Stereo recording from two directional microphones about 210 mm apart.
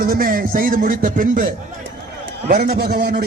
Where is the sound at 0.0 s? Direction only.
40° right (ahead or behind).